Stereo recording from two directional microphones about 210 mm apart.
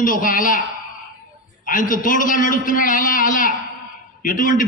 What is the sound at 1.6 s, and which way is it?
A man's voice, 40° left (ahead or behind).